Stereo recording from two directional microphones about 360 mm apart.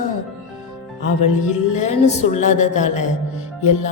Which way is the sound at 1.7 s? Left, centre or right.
Centre.